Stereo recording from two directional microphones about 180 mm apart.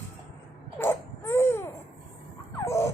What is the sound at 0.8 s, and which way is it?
Baby cry, 15° left (ahead or behind).